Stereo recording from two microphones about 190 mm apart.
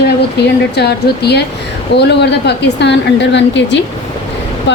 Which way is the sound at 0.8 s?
60° left (ahead or behind).